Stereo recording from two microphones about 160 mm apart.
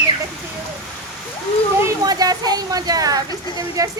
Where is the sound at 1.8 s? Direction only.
25° right (ahead or behind).